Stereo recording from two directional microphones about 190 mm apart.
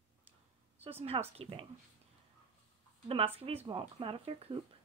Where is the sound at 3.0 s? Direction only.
30° right (ahead or behind).